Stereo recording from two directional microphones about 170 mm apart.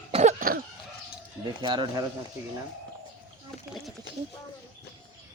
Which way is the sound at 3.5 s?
5° left (ahead or behind).